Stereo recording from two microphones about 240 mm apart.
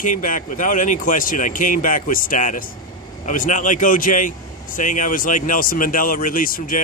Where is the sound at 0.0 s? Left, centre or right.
Left.